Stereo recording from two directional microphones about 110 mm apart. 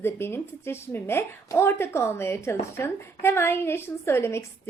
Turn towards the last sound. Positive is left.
turn(degrees=25)  # may be behind; listen again after turning